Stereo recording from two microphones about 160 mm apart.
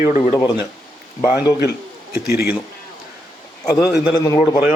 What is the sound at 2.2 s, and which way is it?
Speech, 75° left (ahead or behind).